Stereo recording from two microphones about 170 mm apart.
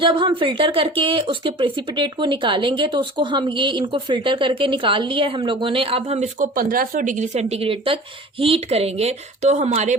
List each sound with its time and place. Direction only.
0.0 s speech: 30° right (ahead or behind)
6.5 s speech: 55° right (ahead or behind)